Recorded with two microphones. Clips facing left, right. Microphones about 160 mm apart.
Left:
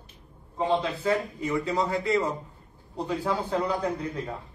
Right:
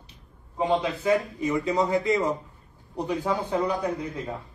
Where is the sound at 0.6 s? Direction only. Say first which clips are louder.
Right 1 dB; 15° right (ahead or behind).